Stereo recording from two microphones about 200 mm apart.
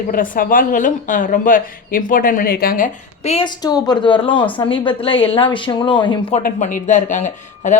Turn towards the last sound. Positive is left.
turn(degrees=35)  # may be behind; listen again after turning